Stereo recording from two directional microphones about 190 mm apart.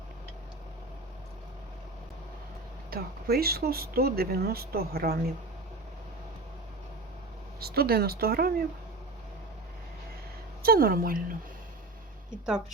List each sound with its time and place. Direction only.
2.9 s speech: 55° right (ahead or behind)
7.6 s speech: 55° right (ahead or behind)
10.6 s speech: 50° right (ahead or behind)
12.3 s a woman's voice: 5° right (ahead or behind)